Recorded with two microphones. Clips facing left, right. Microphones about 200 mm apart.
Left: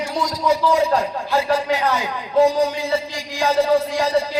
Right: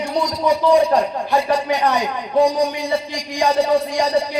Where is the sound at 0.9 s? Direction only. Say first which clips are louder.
Right 2 dB; 15° right (ahead or behind).